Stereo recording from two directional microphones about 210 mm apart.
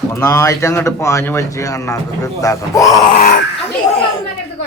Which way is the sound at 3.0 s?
40° left (ahead or behind).